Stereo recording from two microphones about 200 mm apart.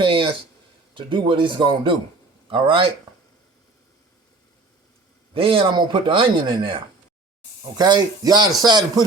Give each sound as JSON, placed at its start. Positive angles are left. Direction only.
{"t": 0.0, "sound": "speech", "side_deg": -25}
{"t": 5.3, "sound": "speech", "side_deg": -25}